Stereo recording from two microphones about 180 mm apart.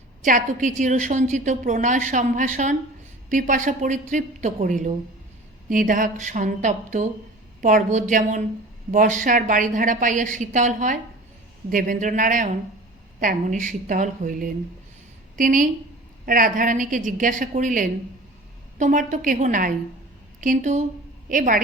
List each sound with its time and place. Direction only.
0.2 s a woman's voice: 45° right (ahead or behind)